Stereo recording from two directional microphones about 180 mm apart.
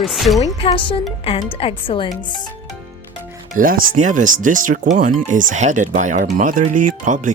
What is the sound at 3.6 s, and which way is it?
Speech, 50° right (ahead or behind).